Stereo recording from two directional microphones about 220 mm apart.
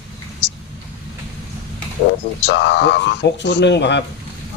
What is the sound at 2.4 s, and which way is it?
Speech, 55° left (ahead or behind).